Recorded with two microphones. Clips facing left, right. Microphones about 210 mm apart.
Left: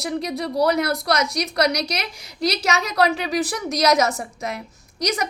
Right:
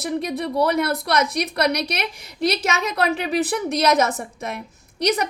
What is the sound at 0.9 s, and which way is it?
A woman's voice, 55° right (ahead or behind).